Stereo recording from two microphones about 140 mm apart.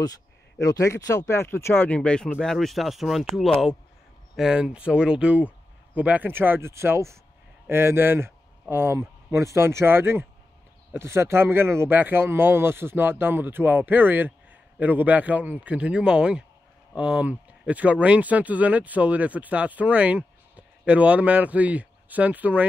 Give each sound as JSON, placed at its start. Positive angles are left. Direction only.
{"t": 0.6, "sound": "speech", "side_deg": 25}